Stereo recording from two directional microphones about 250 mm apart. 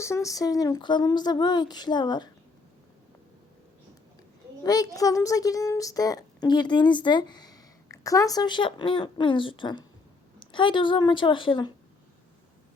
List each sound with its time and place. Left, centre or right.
0.0 s a woman's voice: centre
4.6 s a woman's voice: centre